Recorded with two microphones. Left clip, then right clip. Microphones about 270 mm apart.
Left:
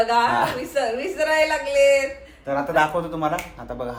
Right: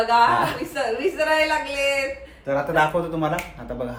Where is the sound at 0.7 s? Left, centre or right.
Centre.